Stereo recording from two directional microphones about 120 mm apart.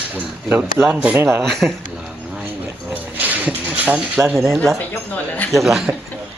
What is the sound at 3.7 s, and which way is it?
Speech, 15° right (ahead or behind).